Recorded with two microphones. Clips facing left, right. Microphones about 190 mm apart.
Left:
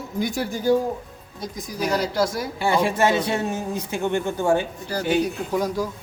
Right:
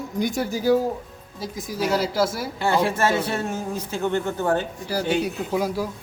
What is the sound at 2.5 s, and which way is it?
Speech, 15° left (ahead or behind).